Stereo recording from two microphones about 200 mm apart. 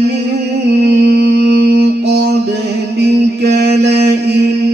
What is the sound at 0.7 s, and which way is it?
Mantra, 55° right (ahead or behind).